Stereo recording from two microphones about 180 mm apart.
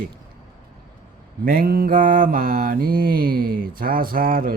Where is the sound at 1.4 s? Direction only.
55° right (ahead or behind).